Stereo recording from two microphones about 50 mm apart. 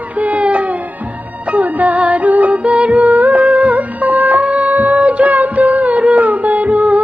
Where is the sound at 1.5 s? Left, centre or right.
Right.